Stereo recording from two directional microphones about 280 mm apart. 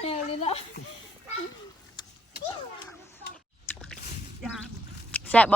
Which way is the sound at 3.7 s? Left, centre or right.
Centre.